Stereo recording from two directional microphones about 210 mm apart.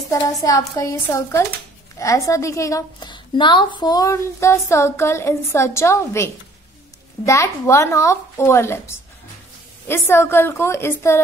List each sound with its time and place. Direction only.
0.1 s a woman's voice: 15° left (ahead or behind)